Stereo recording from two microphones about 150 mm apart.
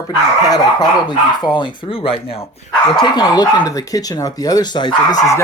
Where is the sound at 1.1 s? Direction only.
30° left (ahead or behind).